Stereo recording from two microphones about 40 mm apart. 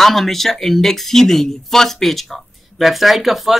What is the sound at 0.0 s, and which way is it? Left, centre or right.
Speech, centre.